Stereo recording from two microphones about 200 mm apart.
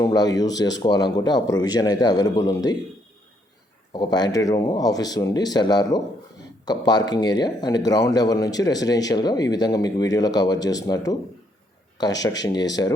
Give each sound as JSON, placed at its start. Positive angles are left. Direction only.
{"t": 0.0, "sound": "speech", "side_deg": 20}
{"t": 3.9, "sound": "speech", "side_deg": 20}
{"t": 12.2, "sound": "speech", "side_deg": 20}